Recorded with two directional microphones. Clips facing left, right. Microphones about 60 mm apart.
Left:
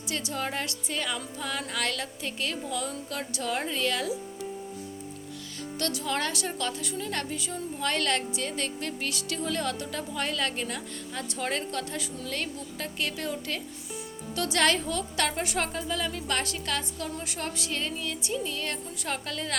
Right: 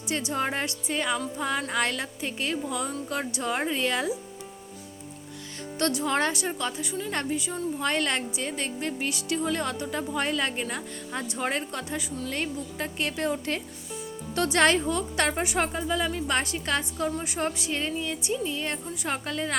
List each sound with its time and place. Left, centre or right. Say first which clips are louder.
0.0 s a woman's voice: right 4 dB; right
5.8 s a woman's voice: right 5 dB; right
15.4 s a woman's voice: right 3 dB; centre